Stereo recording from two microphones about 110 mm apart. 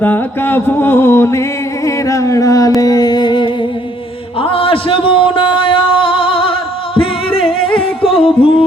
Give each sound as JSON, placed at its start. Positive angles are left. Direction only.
{"t": 0.0, "sound": "music", "side_deg": 15}
{"t": 4.4, "sound": "a sound", "side_deg": 55}
{"t": 7.5, "sound": "music", "side_deg": 55}